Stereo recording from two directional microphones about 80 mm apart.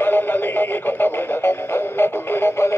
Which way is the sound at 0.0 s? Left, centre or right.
Left.